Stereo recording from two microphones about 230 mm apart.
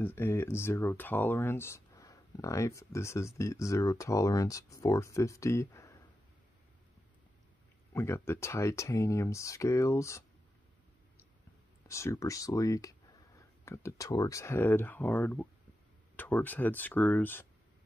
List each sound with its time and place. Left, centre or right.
0.0 s speech: centre
7.9 s speech: centre
11.9 s speech: centre